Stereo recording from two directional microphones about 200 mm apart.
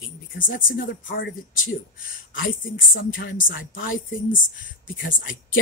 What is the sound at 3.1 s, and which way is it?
Speech, 45° left (ahead or behind).